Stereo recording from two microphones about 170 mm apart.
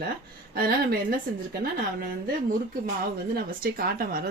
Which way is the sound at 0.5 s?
65° right (ahead or behind).